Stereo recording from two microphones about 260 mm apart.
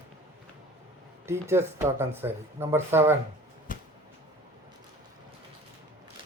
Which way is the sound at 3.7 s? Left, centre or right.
Left.